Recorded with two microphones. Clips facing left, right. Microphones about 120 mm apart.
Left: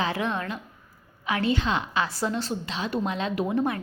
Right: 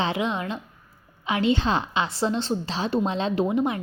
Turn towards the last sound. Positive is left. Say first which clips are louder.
# right 2 dB
turn(degrees=-15)  # may be behind; listen again after turning